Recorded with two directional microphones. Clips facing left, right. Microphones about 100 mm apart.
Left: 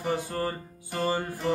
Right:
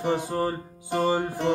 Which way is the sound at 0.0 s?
20° right (ahead or behind).